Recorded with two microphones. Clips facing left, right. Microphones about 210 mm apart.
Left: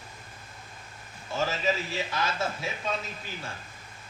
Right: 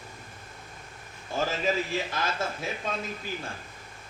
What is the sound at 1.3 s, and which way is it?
Speech, 50° right (ahead or behind).